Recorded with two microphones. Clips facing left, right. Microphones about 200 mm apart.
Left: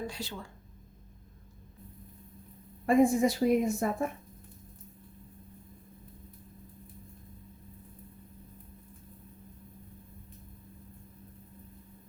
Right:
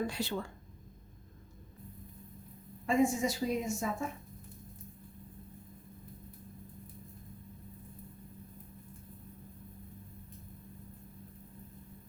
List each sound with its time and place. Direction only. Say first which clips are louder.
0.1 s speech: right 4 dB; 60° right (ahead or behind)
2.8 s a woman's voice: left 5 dB; 55° left (ahead or behind)